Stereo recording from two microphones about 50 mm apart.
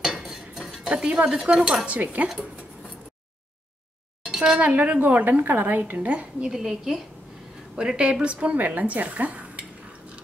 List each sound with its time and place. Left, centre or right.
0.0 s cutlery: centre
0.8 s cutlery: centre
1.9 s speech: right
2.2 s cutlery: centre
4.3 s a sound: centre
4.6 s speech: right
6.5 s cutlery: centre
7.7 s speech: centre